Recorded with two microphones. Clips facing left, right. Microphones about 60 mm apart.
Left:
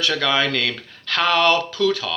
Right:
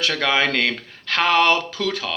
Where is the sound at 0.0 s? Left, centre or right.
Right.